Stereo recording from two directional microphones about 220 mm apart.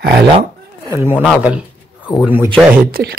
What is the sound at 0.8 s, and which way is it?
Speech, 10° right (ahead or behind).